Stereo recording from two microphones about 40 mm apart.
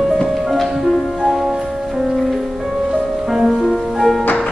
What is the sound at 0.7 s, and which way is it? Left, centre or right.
Music, centre.